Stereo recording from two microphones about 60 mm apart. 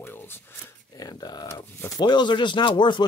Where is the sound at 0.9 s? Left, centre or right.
Left.